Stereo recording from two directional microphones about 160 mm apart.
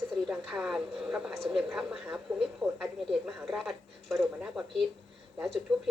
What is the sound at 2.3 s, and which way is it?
Speech, 15° right (ahead or behind).